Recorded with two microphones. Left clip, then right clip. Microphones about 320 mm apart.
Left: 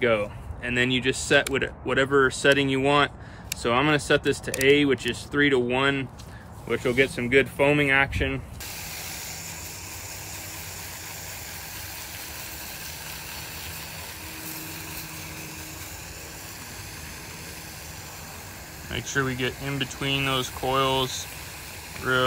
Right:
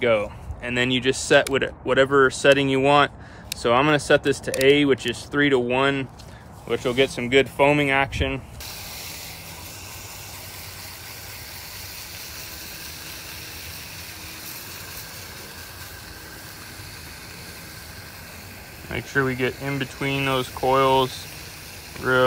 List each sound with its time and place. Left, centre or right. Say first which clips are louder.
0.0 s speech: right 3 dB; centre
18.9 s speech: right 4 dB; centre